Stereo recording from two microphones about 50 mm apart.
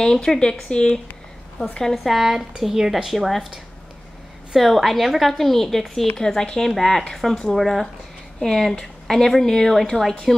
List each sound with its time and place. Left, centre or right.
0.0 s speech: centre
2.0 s a woman's voice: centre
4.6 s a woman's voice: centre